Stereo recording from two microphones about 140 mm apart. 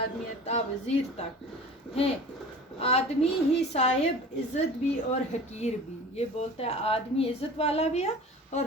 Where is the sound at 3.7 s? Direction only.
55° left (ahead or behind).